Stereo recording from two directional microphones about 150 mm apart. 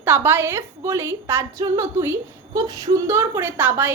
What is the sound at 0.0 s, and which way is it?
A woman's voice, 15° right (ahead or behind).